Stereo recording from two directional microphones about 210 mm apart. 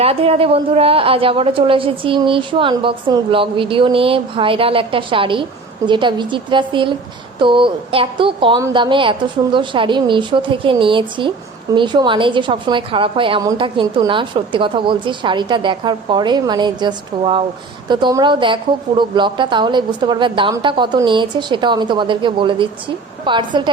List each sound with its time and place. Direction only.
0.0 s a woman's voice: 30° right (ahead or behind)